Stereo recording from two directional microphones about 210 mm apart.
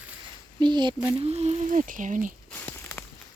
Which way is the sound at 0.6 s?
20° right (ahead or behind).